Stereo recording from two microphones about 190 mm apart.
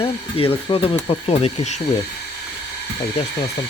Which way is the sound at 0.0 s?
30° left (ahead or behind).